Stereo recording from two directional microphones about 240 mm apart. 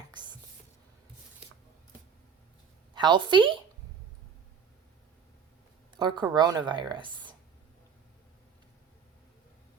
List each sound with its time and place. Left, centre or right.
2.9 s speech: centre
6.0 s speech: centre